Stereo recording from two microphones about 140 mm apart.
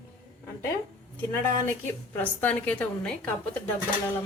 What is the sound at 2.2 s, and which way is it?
Speech, 10° left (ahead or behind).